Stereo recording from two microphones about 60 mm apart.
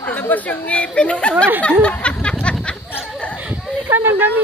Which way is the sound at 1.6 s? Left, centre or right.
Centre.